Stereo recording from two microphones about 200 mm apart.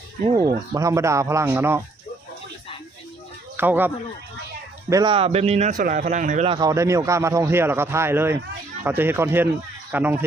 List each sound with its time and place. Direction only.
0.3 s a man's voice: 15° right (ahead or behind)
3.6 s a man's voice: 10° right (ahead or behind)
4.9 s a man's voice: 20° right (ahead or behind); by 6.5 s 40° right (ahead or behind)
6.5 s a man's voice: 20° right (ahead or behind)